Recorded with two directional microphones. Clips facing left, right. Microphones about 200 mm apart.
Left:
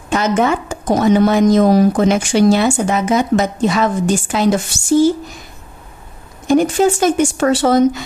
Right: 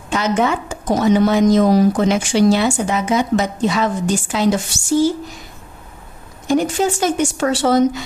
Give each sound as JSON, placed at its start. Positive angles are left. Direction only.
{"t": 0.1, "sound": "a woman's voice", "side_deg": 50}
{"t": 6.4, "sound": "a woman's voice", "side_deg": 50}